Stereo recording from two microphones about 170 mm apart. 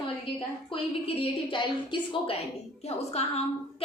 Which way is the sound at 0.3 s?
35° left (ahead or behind).